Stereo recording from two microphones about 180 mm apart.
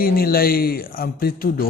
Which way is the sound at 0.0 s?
55° left (ahead or behind).